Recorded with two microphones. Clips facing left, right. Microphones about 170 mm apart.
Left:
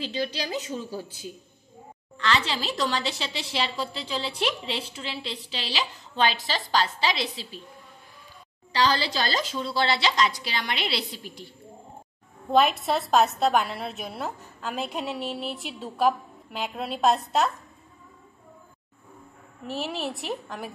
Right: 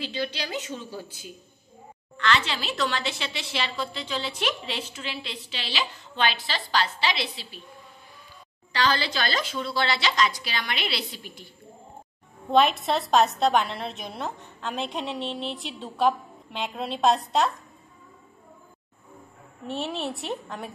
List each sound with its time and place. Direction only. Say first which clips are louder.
0.0 s a woman's voice: left 1 dB; 35° left (ahead or behind)
2.1 s a woman's voice: even; 30° left (ahead or behind)
8.7 s a woman's voice: left 1 dB; 30° left (ahead or behind)
12.4 s a woman's voice: even; centre (ahead or behind)
19.6 s a woman's voice: even; centre (ahead or behind)